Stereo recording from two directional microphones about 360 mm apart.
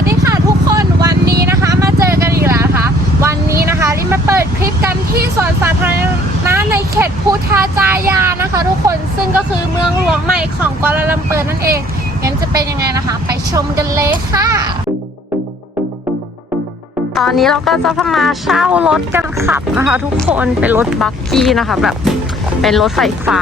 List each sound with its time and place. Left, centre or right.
0.0 s vehicle: centre
1.1 s vehicle: right
1.5 s vehicle: centre
5.4 s a woman's voice: centre
17.2 s speech: centre